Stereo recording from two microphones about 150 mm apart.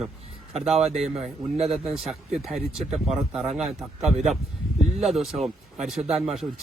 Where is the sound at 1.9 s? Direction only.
Centre (ahead or behind).